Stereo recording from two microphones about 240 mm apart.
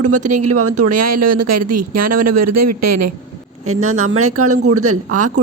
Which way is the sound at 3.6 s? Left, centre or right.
Right.